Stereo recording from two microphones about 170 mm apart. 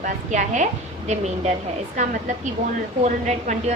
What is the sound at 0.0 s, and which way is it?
A woman's voice, 45° right (ahead or behind).